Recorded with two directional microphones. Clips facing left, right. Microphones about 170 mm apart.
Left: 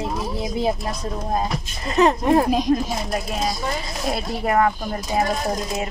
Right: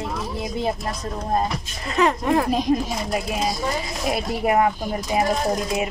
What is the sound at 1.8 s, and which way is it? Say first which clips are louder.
Speech: left 3 dB; 25° left (ahead or behind).